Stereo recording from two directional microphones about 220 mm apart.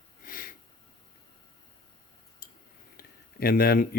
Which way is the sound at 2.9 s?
40° left (ahead or behind).